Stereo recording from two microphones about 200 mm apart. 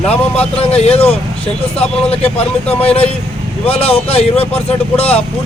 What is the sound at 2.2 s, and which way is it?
Speech, 30° left (ahead or behind).